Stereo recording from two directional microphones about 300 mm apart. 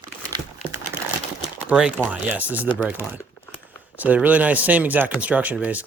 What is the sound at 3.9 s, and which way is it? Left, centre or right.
Speech, centre.